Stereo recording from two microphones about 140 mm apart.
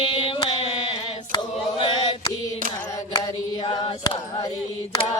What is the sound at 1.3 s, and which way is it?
Chant, 35° left (ahead or behind).